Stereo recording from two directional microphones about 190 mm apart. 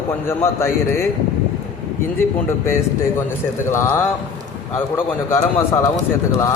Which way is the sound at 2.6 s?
15° left (ahead or behind).